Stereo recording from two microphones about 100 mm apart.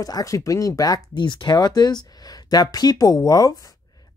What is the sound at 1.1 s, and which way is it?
Speech, 50° left (ahead or behind).